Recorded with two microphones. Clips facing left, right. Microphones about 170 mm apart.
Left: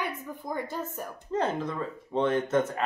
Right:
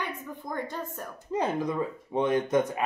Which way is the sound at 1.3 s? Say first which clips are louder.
Right 1 dB; 10° right (ahead or behind).